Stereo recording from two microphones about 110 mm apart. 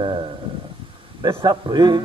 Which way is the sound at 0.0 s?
45° right (ahead or behind).